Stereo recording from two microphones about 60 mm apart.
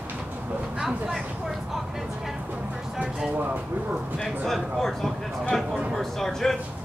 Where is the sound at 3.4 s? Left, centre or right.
Right.